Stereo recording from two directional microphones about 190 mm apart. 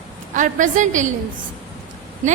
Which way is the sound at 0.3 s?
40° right (ahead or behind).